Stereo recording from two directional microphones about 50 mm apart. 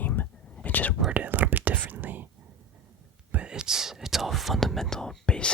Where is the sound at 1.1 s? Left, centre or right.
Right.